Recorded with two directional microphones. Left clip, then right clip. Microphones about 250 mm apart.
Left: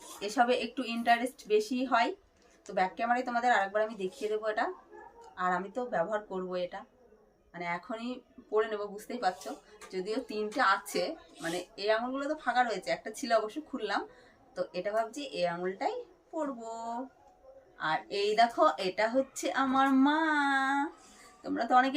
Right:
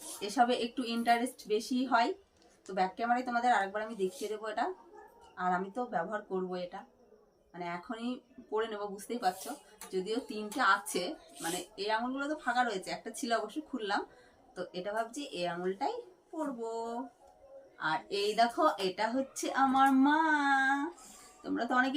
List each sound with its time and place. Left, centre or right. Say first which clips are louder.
0.2 s speech: left 1 dB; centre